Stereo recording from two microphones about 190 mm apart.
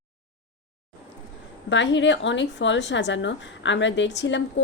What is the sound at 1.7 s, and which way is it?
Speech, 75° left (ahead or behind).